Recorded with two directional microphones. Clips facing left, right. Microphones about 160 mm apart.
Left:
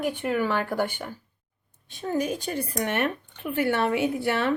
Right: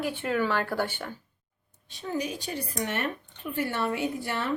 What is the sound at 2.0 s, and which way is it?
A woman's voice, 50° left (ahead or behind).